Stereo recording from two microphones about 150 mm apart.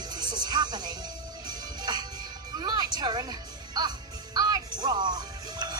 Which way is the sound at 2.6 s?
25° right (ahead or behind).